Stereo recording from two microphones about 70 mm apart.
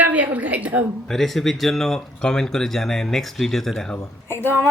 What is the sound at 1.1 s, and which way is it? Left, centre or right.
Speech, centre.